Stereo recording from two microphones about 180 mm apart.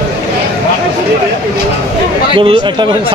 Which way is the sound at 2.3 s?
25° right (ahead or behind).